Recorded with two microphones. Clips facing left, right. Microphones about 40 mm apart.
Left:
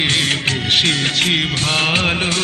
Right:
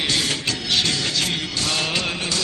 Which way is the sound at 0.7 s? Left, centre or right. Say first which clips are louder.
Left 5 dB; left.